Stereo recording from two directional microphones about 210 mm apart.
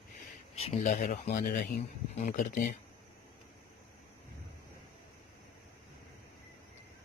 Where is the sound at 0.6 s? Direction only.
35° left (ahead or behind).